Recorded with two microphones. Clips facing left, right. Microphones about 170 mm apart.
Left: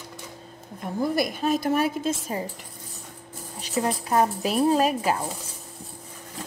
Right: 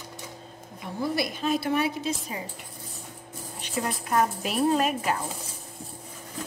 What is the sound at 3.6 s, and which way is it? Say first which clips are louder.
A woman's voice: left 5 dB; 30° left (ahead or behind).